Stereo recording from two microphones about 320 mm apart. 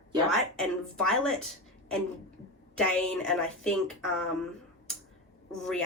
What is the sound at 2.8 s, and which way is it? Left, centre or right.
Speech, centre.